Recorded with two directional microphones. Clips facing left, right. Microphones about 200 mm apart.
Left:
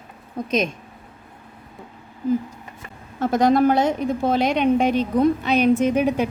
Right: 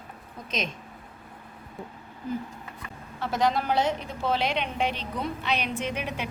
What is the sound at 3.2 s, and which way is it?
A woman's voice, 50° left (ahead or behind).